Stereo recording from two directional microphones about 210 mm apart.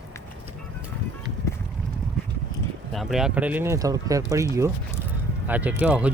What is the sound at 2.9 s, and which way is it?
Speech, centre (ahead or behind).